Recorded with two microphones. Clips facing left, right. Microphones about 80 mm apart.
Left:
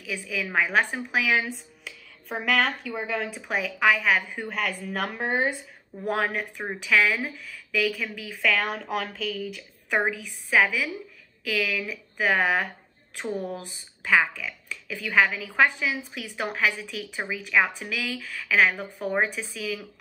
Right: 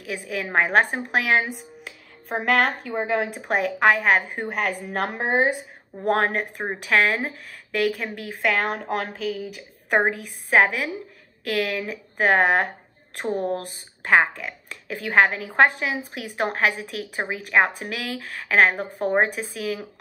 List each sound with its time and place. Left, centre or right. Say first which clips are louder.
0.0 s speech: right 2 dB; right
1.5 s music: right 2 dB; right
2.6 s speech: right 4 dB; right
6.4 s speech: right 4 dB; right
6.8 s speech: right 2 dB; right
9.1 s speech: right 3 dB; centre
10.1 s speech: right 4 dB; right